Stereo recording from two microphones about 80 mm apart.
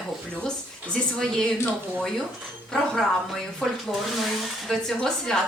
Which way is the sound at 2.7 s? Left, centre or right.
Centre.